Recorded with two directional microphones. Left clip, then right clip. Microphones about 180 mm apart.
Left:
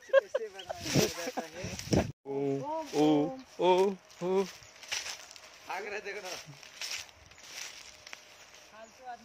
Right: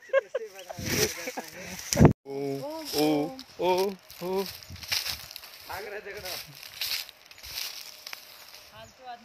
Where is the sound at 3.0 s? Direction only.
25° left (ahead or behind).